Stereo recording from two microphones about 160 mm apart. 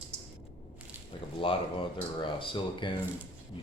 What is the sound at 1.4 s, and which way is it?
Speech, 35° left (ahead or behind).